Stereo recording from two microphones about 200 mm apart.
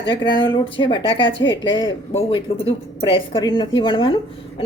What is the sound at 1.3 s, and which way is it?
Speech, 65° left (ahead or behind).